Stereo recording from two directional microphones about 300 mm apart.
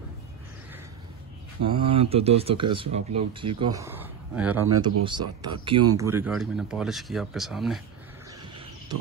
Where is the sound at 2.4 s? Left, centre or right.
Centre.